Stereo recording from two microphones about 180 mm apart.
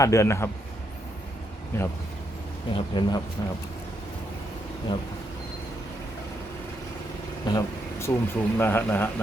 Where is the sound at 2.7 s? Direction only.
25° left (ahead or behind).